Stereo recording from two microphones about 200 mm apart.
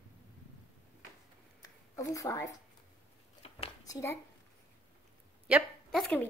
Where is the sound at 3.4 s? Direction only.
30° left (ahead or behind).